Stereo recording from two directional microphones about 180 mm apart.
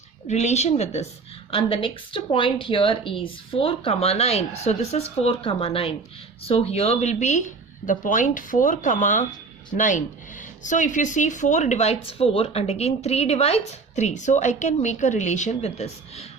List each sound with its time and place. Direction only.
0.3 s speech: 40° left (ahead or behind)